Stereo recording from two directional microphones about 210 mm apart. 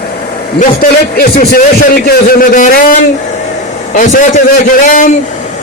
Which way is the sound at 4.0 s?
35° left (ahead or behind).